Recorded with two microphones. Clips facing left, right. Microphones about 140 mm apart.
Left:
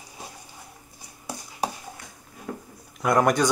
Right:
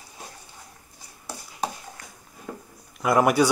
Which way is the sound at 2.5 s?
5° right (ahead or behind).